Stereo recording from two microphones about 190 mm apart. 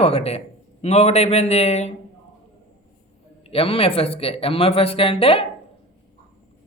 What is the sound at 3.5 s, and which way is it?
A man's voice, 30° left (ahead or behind).